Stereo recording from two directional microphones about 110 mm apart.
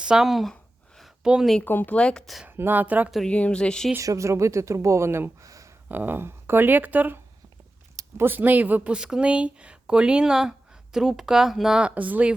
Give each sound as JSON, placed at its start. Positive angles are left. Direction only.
{"t": 0.0, "sound": "speech", "side_deg": -5}
{"t": 0.9, "sound": "a sound", "side_deg": -5}
{"t": 1.6, "sound": "speech", "side_deg": 20}
{"t": 2.5, "sound": "speech", "side_deg": -20}
{"t": 3.1, "sound": "speech", "side_deg": 5}
{"t": 3.9, "sound": "speech", "side_deg": -30}
{"t": 5.9, "sound": "speech", "side_deg": -20}
{"t": 8.2, "sound": "speech", "side_deg": -15}